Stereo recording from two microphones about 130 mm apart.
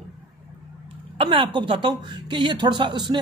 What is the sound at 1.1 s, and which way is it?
A woman's voice, 40° right (ahead or behind).